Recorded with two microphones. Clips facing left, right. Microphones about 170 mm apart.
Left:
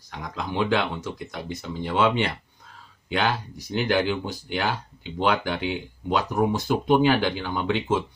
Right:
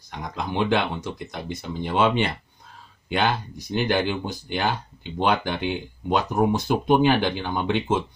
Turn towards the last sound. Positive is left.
turn(degrees=-20)  # may be behind; listen again after turning